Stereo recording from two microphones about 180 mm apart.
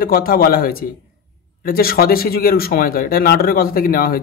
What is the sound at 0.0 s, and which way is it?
Speech, 55° left (ahead or behind).